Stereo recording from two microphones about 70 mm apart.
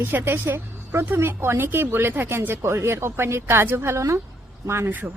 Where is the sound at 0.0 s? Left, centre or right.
Right.